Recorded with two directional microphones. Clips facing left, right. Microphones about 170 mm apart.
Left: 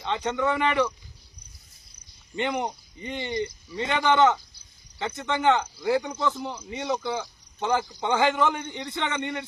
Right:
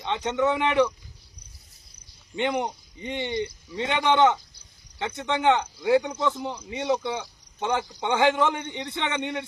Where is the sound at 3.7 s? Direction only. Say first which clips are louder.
Even; 20° right (ahead or behind).